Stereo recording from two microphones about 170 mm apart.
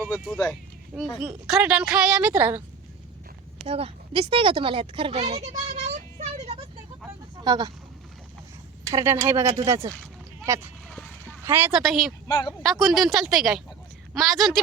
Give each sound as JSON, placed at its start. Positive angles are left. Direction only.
{"t": 0.0, "sound": "speech", "side_deg": 10}
{"t": 0.9, "sound": "a woman's voice", "side_deg": -5}
{"t": 3.7, "sound": "speech", "side_deg": -35}
{"t": 7.3, "sound": "speech", "side_deg": -25}
{"t": 8.9, "sound": "speech", "side_deg": -20}
{"t": 10.8, "sound": "a sound", "side_deg": 5}
{"t": 11.4, "sound": "a woman's voice", "side_deg": -10}
{"t": 11.8, "sound": "a woman's voice", "side_deg": 0}